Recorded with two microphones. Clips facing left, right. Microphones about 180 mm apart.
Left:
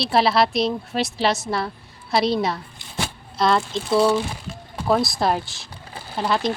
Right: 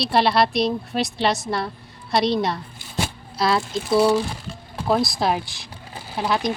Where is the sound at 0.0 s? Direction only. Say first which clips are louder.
Even; centre (ahead or behind).